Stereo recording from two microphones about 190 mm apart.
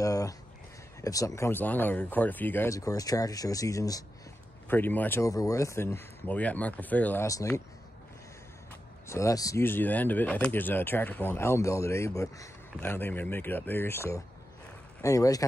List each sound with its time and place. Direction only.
0.0 s a sound: 20° left (ahead or behind)
1.0 s speech: 15° left (ahead or behind)
9.0 s speech: 15° left (ahead or behind)